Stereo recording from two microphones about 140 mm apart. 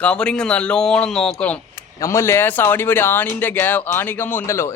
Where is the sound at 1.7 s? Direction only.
20° left (ahead or behind).